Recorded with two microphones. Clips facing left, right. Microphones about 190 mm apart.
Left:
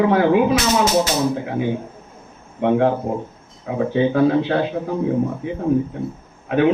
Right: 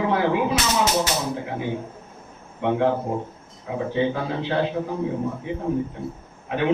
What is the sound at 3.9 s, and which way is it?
A man's voice, 55° left (ahead or behind).